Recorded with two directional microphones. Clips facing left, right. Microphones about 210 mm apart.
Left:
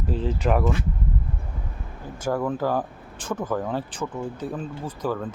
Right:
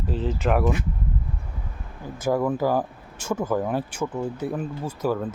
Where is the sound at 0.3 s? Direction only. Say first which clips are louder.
Even; 5° right (ahead or behind).